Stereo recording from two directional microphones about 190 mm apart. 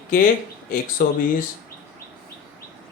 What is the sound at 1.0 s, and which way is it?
Speech, 45° left (ahead or behind).